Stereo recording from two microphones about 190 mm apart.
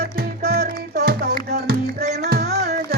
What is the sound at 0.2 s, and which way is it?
Music, 55° right (ahead or behind).